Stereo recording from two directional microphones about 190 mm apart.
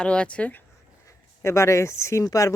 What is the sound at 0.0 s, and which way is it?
Speech, 5° left (ahead or behind).